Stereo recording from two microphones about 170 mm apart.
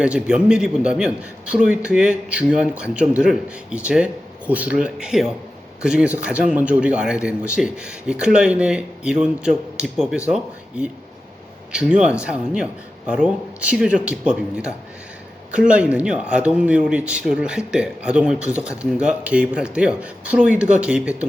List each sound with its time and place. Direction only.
0.0 s speech: 5° right (ahead or behind)